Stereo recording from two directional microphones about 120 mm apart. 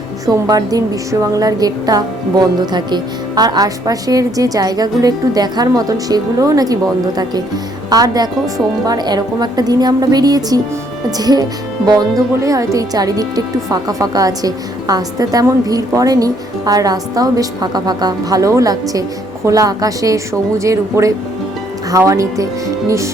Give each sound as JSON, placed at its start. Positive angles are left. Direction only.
{"t": 0.3, "sound": "speech", "side_deg": -30}
{"t": 7.9, "sound": "a woman's voice", "side_deg": -30}